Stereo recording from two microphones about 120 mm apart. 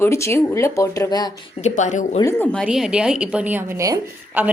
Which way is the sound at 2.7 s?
5° right (ahead or behind).